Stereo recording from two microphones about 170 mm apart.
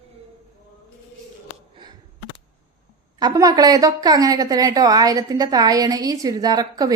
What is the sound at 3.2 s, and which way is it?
A woman's voice, 20° right (ahead or behind).